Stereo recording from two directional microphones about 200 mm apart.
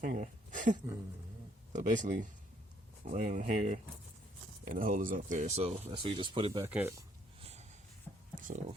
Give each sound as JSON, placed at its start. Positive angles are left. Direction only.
{"t": 0.0, "sound": "speech", "side_deg": -40}
{"t": 6.7, "sound": "speech", "side_deg": -10}
{"t": 8.4, "sound": "a sound", "side_deg": -40}